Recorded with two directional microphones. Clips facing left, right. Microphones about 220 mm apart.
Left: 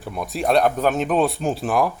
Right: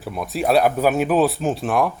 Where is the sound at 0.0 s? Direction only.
Centre (ahead or behind).